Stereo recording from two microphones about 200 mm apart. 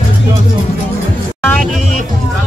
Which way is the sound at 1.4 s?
5° left (ahead or behind).